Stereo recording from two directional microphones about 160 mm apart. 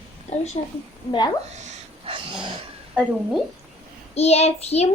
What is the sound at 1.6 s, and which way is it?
Dog, 40° right (ahead or behind).